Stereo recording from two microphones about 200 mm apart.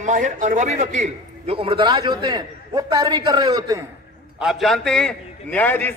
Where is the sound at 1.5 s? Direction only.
25° right (ahead or behind).